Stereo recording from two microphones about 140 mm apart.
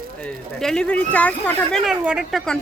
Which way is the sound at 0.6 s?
5° left (ahead or behind).